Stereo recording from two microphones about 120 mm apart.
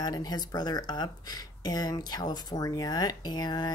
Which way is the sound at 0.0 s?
35° left (ahead or behind).